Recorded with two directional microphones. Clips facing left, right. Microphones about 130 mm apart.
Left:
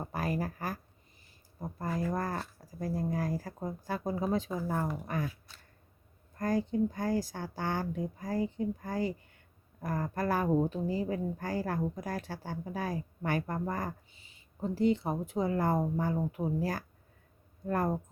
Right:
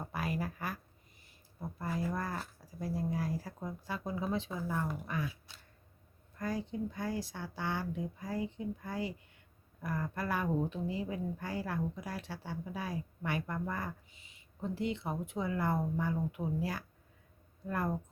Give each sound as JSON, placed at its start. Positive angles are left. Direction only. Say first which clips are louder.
{"t": 0.1, "sound": "speech", "louder": "left 3 dB", "side_deg": 40}
{"t": 1.8, "sound": "a woman's voice", "louder": "left 3 dB", "side_deg": 40}
{"t": 6.3, "sound": "a woman's voice", "louder": "left 7 dB", "side_deg": 45}